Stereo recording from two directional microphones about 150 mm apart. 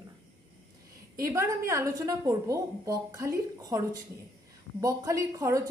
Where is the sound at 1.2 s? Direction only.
20° right (ahead or behind).